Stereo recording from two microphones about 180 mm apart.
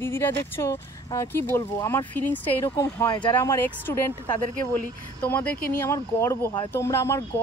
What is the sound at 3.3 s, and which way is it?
Speech, 15° left (ahead or behind).